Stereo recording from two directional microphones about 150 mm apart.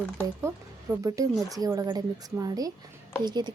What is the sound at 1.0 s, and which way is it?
A woman's voice, 25° right (ahead or behind).